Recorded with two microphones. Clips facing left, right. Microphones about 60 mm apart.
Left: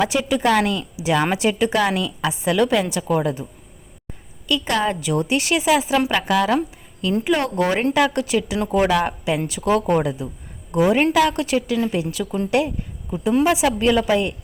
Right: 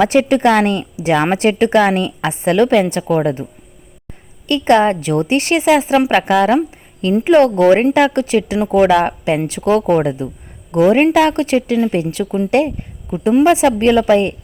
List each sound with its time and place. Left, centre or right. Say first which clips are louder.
0.0 s a woman's voice: right 7 dB; right
4.4 s a woman's voice: right 9 dB; right
10.7 s a woman's voice: right 6 dB; right
11.0 s a woman's voice: right 5 dB; right